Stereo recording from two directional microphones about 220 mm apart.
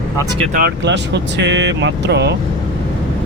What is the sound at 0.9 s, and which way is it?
Speech, 55° right (ahead or behind).